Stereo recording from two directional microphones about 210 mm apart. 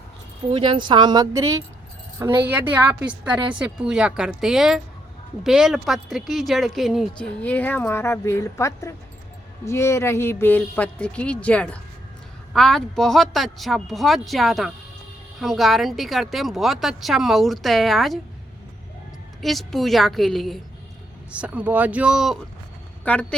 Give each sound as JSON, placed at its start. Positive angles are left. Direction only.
{"t": 0.5, "sound": "a woman's voice", "side_deg": -25}
{"t": 19.4, "sound": "speech", "side_deg": 0}